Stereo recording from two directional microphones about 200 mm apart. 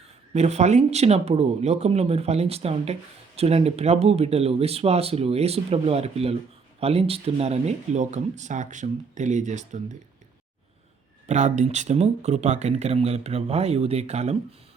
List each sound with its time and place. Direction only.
0.3 s speech: 35° right (ahead or behind)
11.3 s speech: 35° right (ahead or behind)